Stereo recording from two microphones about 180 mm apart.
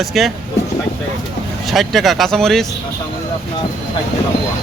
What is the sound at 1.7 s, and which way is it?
Speech, centre (ahead or behind).